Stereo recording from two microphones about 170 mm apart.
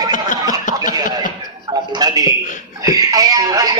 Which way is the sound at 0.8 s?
25° right (ahead or behind).